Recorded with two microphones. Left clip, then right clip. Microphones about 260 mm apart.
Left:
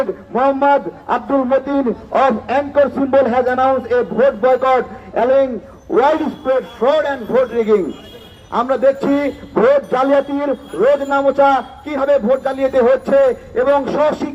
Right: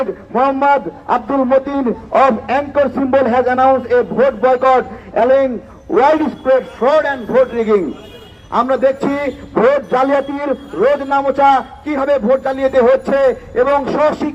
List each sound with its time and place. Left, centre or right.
0.3 s a man's voice: right